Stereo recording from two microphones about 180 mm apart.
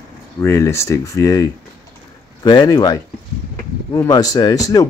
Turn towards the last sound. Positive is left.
turn(degrees=20)  # may be behind; listen again after turning